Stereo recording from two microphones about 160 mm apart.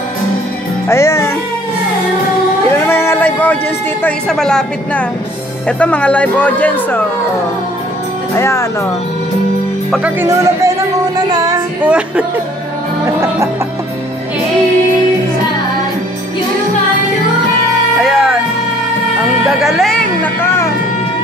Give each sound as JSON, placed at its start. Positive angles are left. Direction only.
{"t": 0.8, "sound": "speech", "side_deg": 20}
{"t": 2.9, "sound": "a sound", "side_deg": 15}
{"t": 4.0, "sound": "speech", "side_deg": 5}
{"t": 8.4, "sound": "speech", "side_deg": 20}
{"t": 9.8, "sound": "speech", "side_deg": 0}
{"t": 10.2, "sound": "speech", "side_deg": -20}
{"t": 11.1, "sound": "music", "side_deg": -25}
{"t": 11.8, "sound": "speech", "side_deg": -10}
{"t": 18.0, "sound": "music", "side_deg": 0}
{"t": 19.4, "sound": "a sound", "side_deg": 0}